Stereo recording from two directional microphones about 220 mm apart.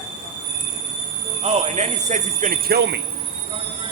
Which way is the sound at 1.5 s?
30° right (ahead or behind).